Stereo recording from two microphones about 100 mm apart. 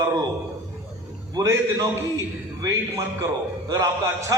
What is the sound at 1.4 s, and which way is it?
A man's voice, 30° right (ahead or behind).